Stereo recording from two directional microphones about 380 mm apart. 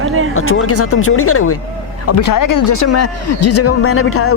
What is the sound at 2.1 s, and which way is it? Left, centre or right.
Speech, left.